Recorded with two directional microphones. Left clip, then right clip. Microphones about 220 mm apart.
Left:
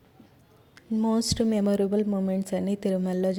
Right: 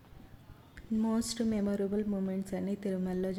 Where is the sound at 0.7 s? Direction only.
25° left (ahead or behind).